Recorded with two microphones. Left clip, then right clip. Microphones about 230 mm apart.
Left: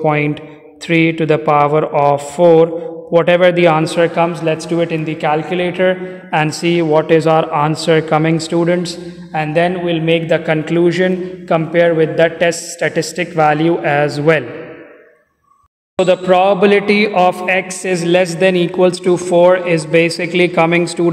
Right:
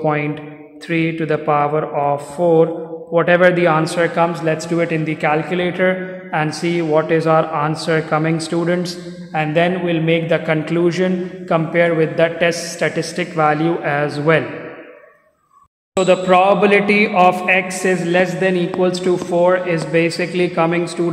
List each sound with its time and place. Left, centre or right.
0.0 s a man's voice: left
6.3 s a man's voice: left
16.0 s a man's voice: left
17.9 s speech: left